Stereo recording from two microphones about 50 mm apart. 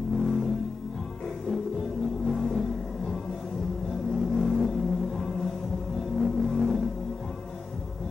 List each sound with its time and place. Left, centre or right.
0.2 s music: centre
2.2 s a sound: centre
4.1 s vehicle: centre
5.9 s music: centre